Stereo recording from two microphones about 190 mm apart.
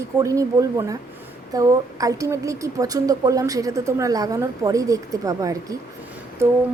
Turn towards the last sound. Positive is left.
turn(degrees=-15)  # may be behind; listen again after turning